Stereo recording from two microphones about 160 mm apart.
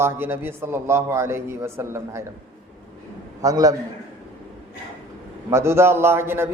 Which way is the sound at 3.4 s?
20° right (ahead or behind).